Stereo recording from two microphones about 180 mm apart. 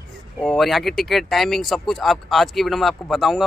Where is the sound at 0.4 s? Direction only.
Centre (ahead or behind).